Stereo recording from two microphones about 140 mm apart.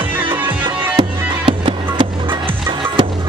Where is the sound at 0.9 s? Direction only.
35° right (ahead or behind).